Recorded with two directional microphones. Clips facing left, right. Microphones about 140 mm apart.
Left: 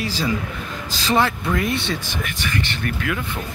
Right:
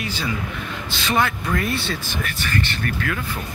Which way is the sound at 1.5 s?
20° left (ahead or behind).